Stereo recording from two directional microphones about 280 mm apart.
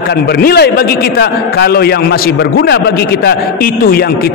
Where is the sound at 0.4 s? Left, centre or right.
Left.